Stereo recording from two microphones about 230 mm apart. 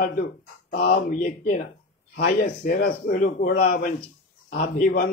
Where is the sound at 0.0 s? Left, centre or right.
Left.